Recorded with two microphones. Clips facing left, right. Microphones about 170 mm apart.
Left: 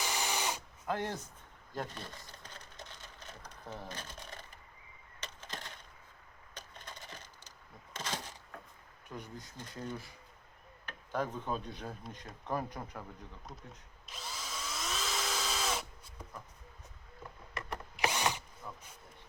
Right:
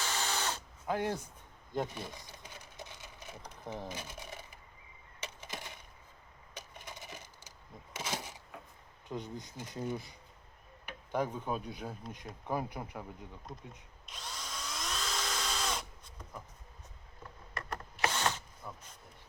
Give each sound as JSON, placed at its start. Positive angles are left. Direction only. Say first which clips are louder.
{"t": 0.0, "sound": "drill", "louder": "even", "side_deg": 15}
{"t": 0.9, "sound": "speech", "louder": "right 2 dB", "side_deg": -10}
{"t": 1.7, "sound": "a sound", "louder": "right 5 dB", "side_deg": -15}
{"t": 9.0, "sound": "speech", "louder": "right 5 dB", "side_deg": -20}
{"t": 14.1, "sound": "drill", "louder": "left 1 dB", "side_deg": 0}
{"t": 17.6, "sound": "drill", "louder": "even", "side_deg": 15}
{"t": 18.6, "sound": "vehicle", "louder": "right 1 dB", "side_deg": -5}